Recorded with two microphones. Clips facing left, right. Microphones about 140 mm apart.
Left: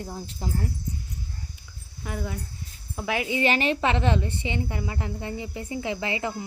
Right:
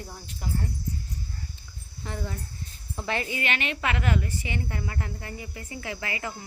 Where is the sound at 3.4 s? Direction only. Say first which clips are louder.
Left 7 dB; 35° left (ahead or behind).